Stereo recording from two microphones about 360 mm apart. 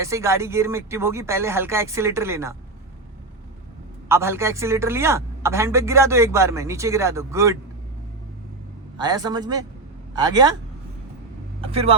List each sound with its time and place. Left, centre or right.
0.0 s speech: centre
4.1 s speech: centre
9.0 s speech: centre
11.6 s speech: centre